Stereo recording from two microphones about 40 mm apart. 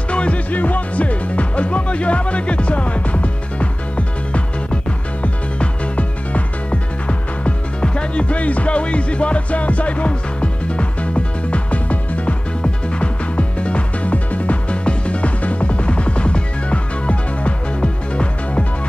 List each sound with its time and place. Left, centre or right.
0.1 s music: left